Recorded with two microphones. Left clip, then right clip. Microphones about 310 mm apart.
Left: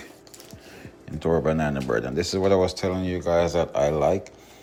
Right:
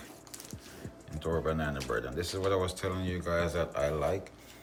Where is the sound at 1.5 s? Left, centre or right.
Centre.